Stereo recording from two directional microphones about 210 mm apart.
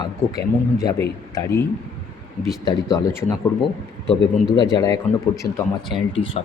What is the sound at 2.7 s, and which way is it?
Speech, 20° left (ahead or behind).